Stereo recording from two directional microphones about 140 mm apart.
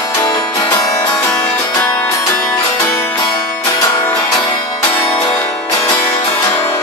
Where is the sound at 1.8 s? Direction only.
20° left (ahead or behind).